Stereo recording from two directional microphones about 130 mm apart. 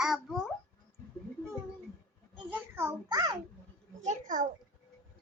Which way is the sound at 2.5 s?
20° right (ahead or behind).